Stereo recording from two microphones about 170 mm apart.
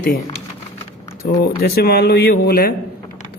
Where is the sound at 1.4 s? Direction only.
65° left (ahead or behind).